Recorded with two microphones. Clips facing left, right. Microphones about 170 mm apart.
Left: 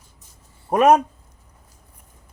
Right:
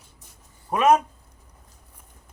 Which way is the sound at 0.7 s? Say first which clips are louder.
Left 4 dB; 40° left (ahead or behind).